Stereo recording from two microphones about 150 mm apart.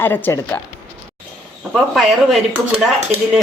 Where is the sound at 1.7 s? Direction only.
Centre (ahead or behind).